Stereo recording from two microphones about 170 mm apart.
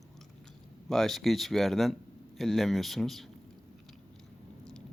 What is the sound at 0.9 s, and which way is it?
Speech, centre (ahead or behind).